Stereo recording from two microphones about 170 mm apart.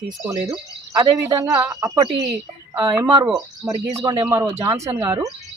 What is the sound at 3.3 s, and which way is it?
Speech, 20° right (ahead or behind).